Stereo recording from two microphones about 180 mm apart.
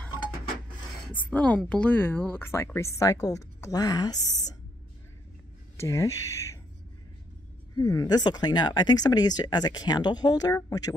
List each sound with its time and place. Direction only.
1.0 s speech: 5° left (ahead or behind)
5.8 s speech: 15° left (ahead or behind)
7.7 s speech: 20° left (ahead or behind)